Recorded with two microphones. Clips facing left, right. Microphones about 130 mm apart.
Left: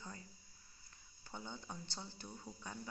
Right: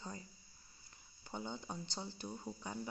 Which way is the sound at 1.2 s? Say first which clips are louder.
Right 5 dB; 20° right (ahead or behind).